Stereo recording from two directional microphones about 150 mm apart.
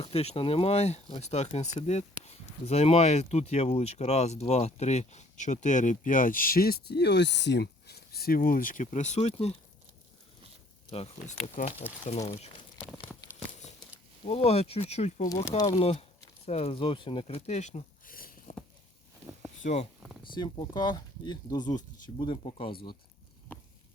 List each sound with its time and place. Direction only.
0.0 s speech: 45° left (ahead or behind)
10.9 s speech: 45° left (ahead or behind)
14.3 s speech: 40° left (ahead or behind); by 18.5 s 70° left (ahead or behind)
19.6 s speech: 45° left (ahead or behind)
20.2 s speech: 30° left (ahead or behind)
23.5 s a sound: 15° left (ahead or behind)